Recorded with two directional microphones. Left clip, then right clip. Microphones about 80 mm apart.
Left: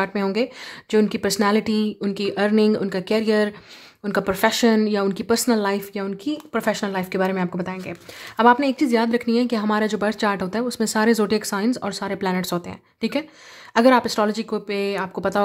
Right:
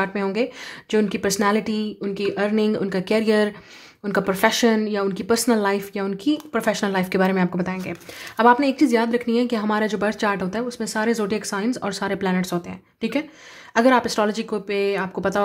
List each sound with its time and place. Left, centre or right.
0.0 s a woman's voice: left; by 3.5 s centre
4.0 s a woman's voice: centre
5.2 s speech: centre
6.3 s speech: centre
6.9 s speech: centre
8.4 s a woman's voice: left
10.6 s speech: left
11.8 s speech: centre
12.2 s speech: left
13.0 s a woman's voice: left